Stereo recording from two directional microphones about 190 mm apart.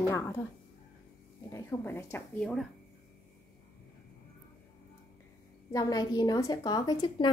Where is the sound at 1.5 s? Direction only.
15° left (ahead or behind).